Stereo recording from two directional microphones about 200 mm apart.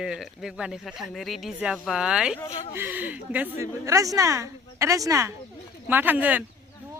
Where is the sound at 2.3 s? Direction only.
15° left (ahead or behind).